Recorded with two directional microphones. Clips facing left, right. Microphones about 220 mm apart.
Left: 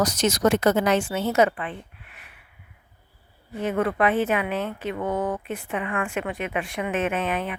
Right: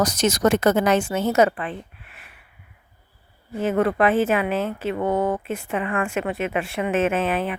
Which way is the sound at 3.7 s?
40° right (ahead or behind).